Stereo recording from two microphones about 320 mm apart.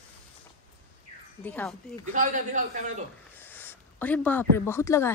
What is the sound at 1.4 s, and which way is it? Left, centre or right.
Speech, centre.